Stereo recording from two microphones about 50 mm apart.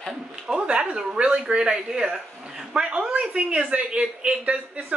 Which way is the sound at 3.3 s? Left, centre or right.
Right.